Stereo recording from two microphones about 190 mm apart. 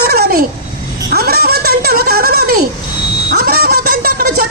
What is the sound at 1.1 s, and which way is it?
Music, 55° right (ahead or behind).